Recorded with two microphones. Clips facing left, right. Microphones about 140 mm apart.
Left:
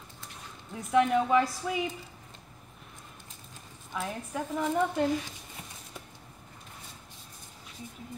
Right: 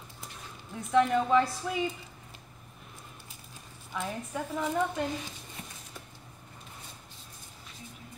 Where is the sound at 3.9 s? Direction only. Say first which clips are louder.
Even; 5° left (ahead or behind).